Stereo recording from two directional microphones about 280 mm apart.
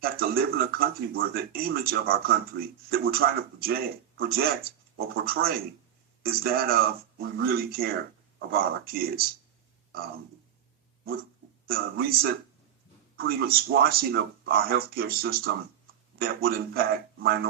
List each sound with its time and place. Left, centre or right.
0.0 s speech: right
11.6 s speech: right